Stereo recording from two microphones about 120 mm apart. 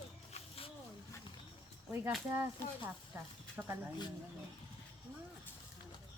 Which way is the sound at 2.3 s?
20° right (ahead or behind).